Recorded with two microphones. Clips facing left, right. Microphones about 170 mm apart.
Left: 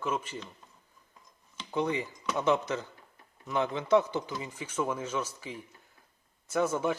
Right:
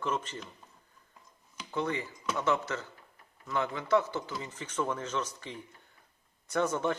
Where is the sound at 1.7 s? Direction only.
15° left (ahead or behind).